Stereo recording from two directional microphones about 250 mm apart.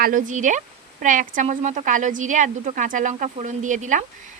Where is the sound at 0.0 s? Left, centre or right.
Right.